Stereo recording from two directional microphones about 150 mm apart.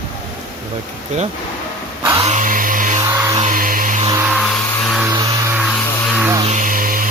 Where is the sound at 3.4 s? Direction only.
65° right (ahead or behind).